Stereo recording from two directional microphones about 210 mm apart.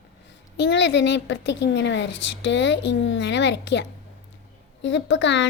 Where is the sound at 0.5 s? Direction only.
60° left (ahead or behind).